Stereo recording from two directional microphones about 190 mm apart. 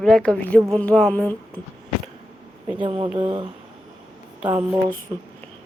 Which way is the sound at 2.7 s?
25° right (ahead or behind).